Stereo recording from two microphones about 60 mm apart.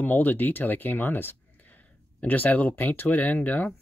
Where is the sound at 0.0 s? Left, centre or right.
Left.